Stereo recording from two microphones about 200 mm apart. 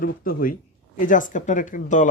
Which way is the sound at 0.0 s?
45° left (ahead or behind).